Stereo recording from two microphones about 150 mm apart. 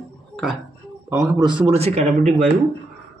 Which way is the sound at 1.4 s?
35° right (ahead or behind).